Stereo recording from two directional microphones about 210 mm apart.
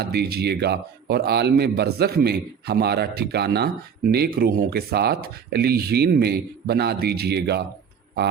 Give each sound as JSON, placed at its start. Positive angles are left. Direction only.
{"t": 0.0, "sound": "speech", "side_deg": -50}